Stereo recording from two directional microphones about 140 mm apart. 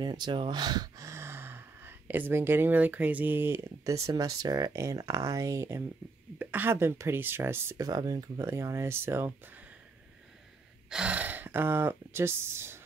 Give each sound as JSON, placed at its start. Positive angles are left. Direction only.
{"t": 0.0, "sound": "speech", "side_deg": -30}
{"t": 10.9, "sound": "speech", "side_deg": -10}